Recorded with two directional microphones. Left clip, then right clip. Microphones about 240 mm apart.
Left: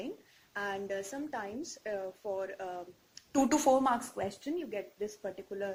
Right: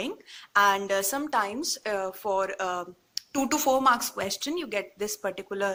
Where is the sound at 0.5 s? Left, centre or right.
Centre.